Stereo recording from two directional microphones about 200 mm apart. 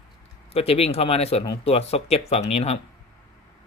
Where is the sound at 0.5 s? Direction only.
30° left (ahead or behind).